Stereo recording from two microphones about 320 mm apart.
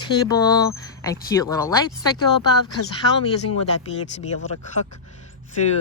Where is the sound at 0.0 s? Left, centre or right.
Centre.